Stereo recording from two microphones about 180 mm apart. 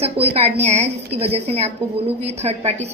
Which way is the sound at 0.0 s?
35° right (ahead or behind).